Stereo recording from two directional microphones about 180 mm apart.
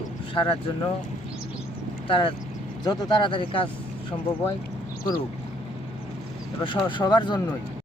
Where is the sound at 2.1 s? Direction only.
30° left (ahead or behind).